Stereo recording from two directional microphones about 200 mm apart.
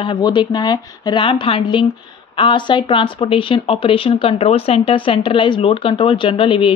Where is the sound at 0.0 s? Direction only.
25° left (ahead or behind).